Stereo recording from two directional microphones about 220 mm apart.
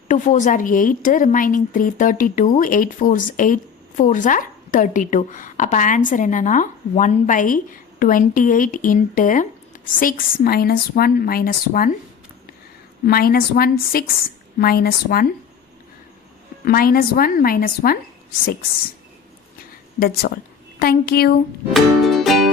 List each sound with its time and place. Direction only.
0.1 s a woman's voice: 35° left (ahead or behind)
13.1 s a woman's voice: 45° left (ahead or behind)
16.6 s a woman's voice: 40° left (ahead or behind)
20.0 s a woman's voice: 40° left (ahead or behind)
21.7 s music: centre (ahead or behind)